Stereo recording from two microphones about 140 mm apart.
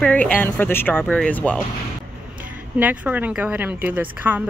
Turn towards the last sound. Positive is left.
turn(degrees=-10)  # may be behind; listen again after turning